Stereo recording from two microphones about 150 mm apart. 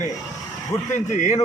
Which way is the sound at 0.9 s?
55° left (ahead or behind).